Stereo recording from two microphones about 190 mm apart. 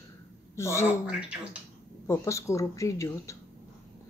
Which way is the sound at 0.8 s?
5° right (ahead or behind).